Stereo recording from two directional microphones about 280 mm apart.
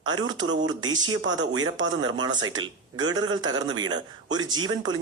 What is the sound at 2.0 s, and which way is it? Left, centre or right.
Speech, centre.